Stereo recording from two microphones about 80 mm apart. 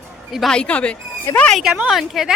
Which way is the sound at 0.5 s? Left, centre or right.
Centre.